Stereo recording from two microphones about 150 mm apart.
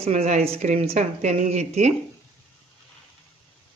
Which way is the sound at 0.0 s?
45° right (ahead or behind).